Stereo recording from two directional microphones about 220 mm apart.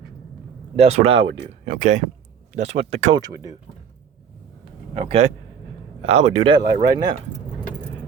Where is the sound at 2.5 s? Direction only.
30° right (ahead or behind).